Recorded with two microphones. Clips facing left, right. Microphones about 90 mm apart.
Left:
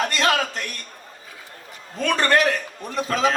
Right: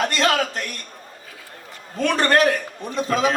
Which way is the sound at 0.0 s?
40° right (ahead or behind).